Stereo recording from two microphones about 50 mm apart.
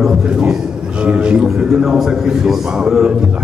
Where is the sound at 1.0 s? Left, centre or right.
Centre.